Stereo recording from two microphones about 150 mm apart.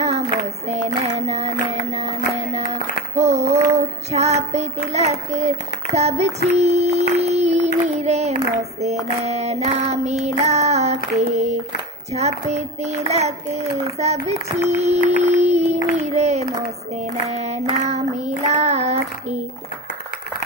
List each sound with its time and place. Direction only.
0.7 s a child's voice: 50° right (ahead or behind)
2.3 s female singing: 45° right (ahead or behind)
5.9 s child singing: 45° right (ahead or behind)
8.8 s a child's voice: 45° right (ahead or behind)